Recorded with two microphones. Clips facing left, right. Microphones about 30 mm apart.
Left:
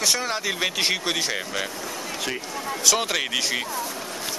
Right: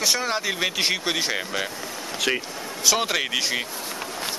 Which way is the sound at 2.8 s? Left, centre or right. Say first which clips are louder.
Right 1 dB; centre.